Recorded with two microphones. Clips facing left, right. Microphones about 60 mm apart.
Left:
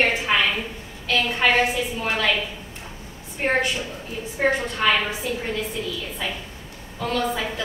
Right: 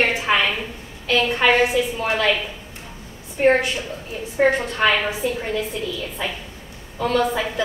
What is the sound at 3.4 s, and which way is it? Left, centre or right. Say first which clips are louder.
Speech: right 6 dB; centre.